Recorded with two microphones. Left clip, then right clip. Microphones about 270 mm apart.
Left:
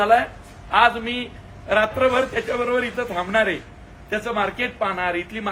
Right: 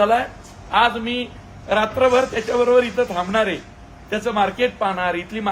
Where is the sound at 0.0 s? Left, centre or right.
Centre.